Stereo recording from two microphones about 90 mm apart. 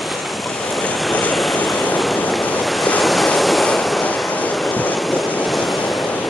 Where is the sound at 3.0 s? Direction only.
Centre (ahead or behind).